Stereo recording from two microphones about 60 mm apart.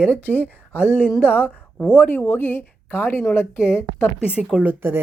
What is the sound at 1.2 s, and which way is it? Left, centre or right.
Speech, left.